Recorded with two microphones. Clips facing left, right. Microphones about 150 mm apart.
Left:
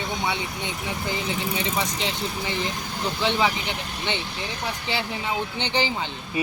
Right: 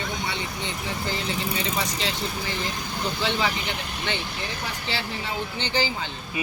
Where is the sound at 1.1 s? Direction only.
15° left (ahead or behind).